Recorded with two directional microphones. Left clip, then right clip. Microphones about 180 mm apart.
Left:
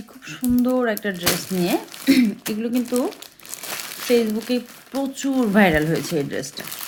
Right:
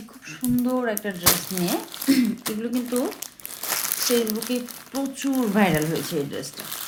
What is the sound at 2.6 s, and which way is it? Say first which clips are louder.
Speech: left 4 dB; 35° left (ahead or behind).